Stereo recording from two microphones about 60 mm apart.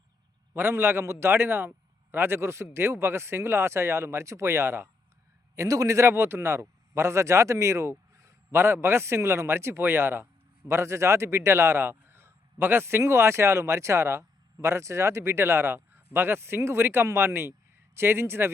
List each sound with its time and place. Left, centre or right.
0.5 s speech: right
5.5 s speech: right
8.5 s speech: right